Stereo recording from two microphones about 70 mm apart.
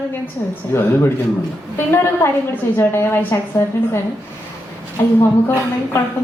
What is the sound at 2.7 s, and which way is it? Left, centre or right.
Speech, left.